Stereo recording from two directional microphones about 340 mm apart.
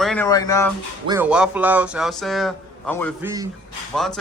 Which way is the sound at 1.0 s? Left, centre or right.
Centre.